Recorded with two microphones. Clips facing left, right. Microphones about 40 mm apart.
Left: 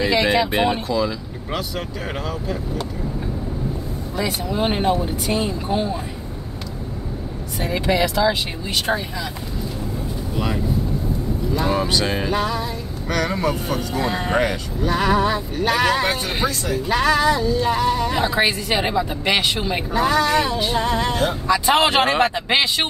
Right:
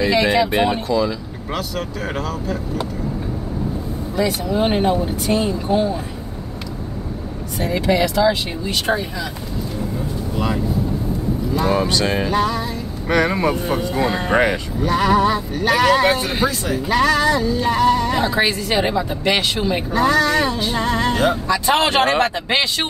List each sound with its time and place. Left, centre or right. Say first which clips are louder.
0.0 s speech: right 2 dB; centre
4.2 s speech: right 4 dB; centre
7.7 s speech: right 2 dB; centre
11.5 s speech: right 2 dB; centre
13.1 s speech: right 5 dB; right
13.5 s speech: right 3 dB; centre
14.9 s speech: right 3 dB; centre